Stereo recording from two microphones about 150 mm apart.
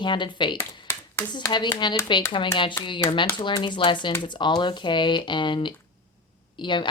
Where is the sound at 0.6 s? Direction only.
15° left (ahead or behind).